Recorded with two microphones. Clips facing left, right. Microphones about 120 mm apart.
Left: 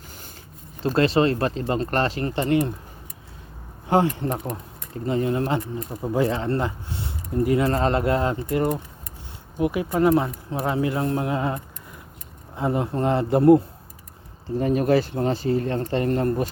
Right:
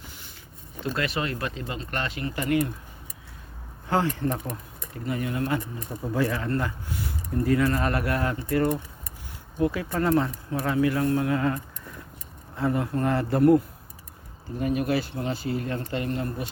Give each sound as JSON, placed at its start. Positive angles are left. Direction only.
{"t": 0.9, "sound": "speech", "side_deg": 30}
{"t": 3.8, "sound": "speech", "side_deg": 20}